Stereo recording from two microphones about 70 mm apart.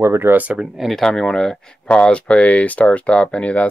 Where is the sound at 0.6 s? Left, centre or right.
Centre.